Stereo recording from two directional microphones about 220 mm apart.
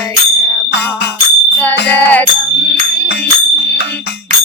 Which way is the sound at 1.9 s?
10° left (ahead or behind).